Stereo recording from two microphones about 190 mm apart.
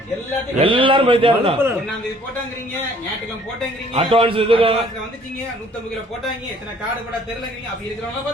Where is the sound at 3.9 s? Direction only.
30° right (ahead or behind).